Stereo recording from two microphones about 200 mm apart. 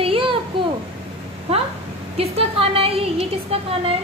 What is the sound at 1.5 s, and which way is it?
A woman's voice, 30° right (ahead or behind).